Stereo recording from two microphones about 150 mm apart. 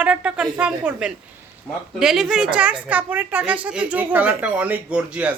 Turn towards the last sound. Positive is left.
turn(degrees=-10)  # may be behind; listen again after turning